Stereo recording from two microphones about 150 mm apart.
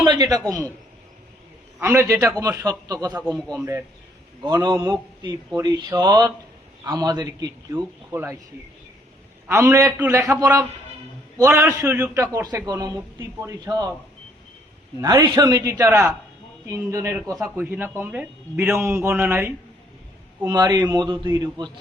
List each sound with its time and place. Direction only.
0.0 s a sound: 25° right (ahead or behind)
1.8 s a man's voice: 15° right (ahead or behind)
3.2 s a man's voice: 5° left (ahead or behind)
4.4 s a man's voice: 25° right (ahead or behind)
9.5 s a man's voice: 20° right (ahead or behind)
11.3 s a man's voice: 20° right (ahead or behind)
15.0 s a man's voice: 25° right (ahead or behind)
20.4 s a man's voice: 25° right (ahead or behind)